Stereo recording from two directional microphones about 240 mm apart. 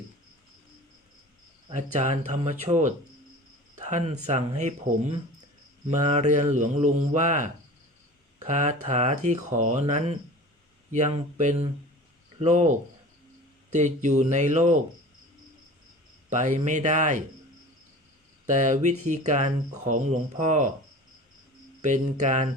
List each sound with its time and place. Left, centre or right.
1.7 s speech: right
3.8 s cricket: right
4.3 s speech: right
5.9 s speech: right
13.7 s speech: right
16.3 s speech: right
18.4 s speech: right
21.8 s speech: right